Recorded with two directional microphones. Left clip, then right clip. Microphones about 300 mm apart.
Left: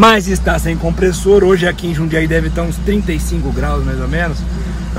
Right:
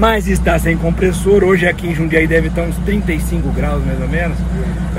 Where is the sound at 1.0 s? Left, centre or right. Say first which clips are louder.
Left 2 dB; left.